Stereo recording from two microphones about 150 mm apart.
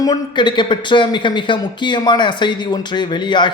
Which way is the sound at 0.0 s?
25° left (ahead or behind).